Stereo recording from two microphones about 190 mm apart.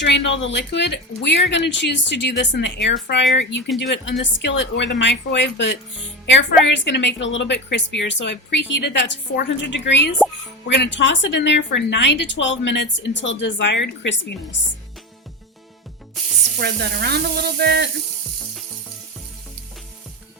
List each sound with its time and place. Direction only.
0.0 s a woman's voice: 65° left (ahead or behind)
16.6 s speech: 60° right (ahead or behind)